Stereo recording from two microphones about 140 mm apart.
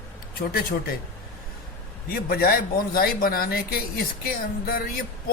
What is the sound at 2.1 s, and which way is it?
Speech, 90° left.